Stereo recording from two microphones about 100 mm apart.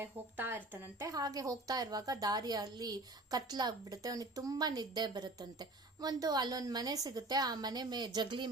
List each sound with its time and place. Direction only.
0.0 s speech: 20° right (ahead or behind)
1.0 s a woman's voice: 40° right (ahead or behind)